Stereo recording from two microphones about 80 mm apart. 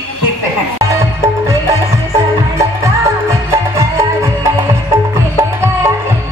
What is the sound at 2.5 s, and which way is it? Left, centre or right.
Music, right.